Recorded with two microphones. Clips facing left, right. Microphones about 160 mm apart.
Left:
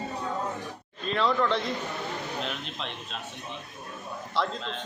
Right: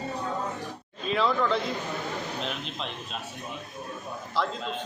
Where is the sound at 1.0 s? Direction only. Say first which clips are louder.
Even; 5° right (ahead or behind).